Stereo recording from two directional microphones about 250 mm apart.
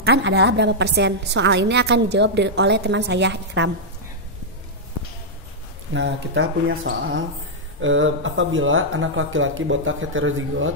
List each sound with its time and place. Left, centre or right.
0.0 s a woman's voice: right
5.9 s a woman's voice: right